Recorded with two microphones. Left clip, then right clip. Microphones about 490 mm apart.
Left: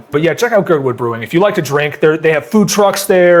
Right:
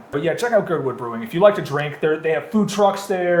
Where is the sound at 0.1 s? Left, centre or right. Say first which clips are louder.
Left 7 dB; left.